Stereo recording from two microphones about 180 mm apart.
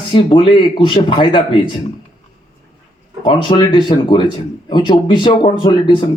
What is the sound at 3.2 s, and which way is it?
Speech, 25° left (ahead or behind).